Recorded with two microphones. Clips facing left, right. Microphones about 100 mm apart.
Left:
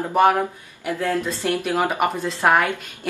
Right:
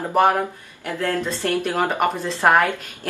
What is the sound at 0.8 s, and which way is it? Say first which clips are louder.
Speech: left 1 dB; 10° left (ahead or behind).